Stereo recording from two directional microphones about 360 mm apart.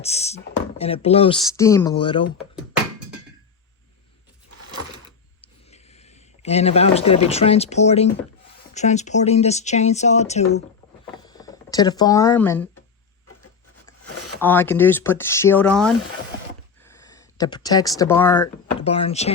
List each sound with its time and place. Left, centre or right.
0.0 s speech: centre
5.7 s speech: centre
11.0 s a sound: centre
14.4 s speech: centre